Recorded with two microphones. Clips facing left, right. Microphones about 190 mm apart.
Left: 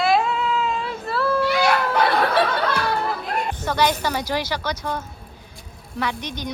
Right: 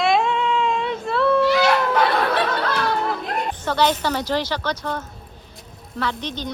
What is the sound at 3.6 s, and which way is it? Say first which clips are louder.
Speech: right 1 dB; 10° left (ahead or behind).